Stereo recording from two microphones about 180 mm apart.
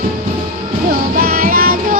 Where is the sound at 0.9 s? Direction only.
55° right (ahead or behind).